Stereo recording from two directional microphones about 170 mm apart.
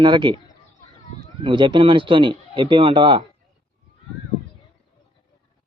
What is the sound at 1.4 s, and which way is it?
A man's voice, 25° right (ahead or behind).